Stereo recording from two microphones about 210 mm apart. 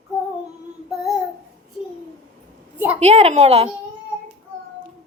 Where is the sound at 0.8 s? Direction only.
Centre (ahead or behind).